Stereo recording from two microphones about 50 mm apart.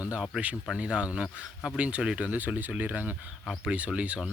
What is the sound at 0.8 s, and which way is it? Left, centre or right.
Speech, centre.